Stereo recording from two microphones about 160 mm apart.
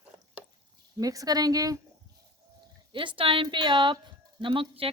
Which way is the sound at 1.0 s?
20° right (ahead or behind).